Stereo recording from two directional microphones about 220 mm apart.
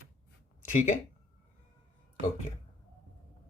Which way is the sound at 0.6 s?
35° left (ahead or behind).